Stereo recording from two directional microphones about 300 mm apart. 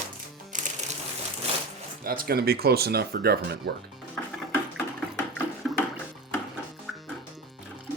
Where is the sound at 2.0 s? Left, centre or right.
Right.